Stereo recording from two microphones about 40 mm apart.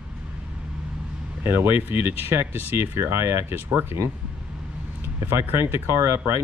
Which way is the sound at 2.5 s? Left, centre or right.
Right.